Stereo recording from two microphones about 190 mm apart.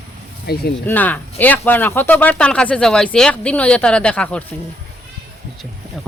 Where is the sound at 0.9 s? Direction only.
10° left (ahead or behind).